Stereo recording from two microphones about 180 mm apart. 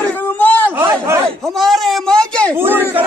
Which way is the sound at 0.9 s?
15° right (ahead or behind).